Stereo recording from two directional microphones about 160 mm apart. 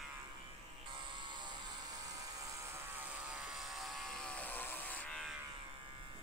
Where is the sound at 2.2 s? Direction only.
20° right (ahead or behind); by 5.3 s 5° left (ahead or behind).